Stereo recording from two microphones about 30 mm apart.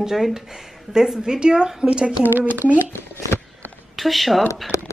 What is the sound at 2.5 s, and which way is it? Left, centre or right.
Speech, right.